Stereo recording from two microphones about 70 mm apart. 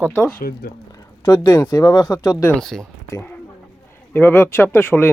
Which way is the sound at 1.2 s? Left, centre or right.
Left.